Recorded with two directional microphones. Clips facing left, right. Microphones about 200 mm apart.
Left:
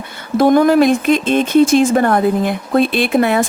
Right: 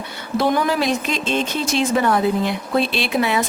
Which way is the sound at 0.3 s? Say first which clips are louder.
Left 9 dB; 50° left (ahead or behind).